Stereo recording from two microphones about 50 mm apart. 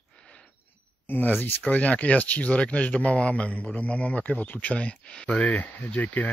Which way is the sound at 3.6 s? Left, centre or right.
Left.